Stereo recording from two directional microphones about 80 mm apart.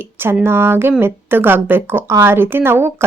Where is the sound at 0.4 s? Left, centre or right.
Right.